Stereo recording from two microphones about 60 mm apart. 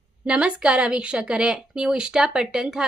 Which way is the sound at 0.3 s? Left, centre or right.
Centre.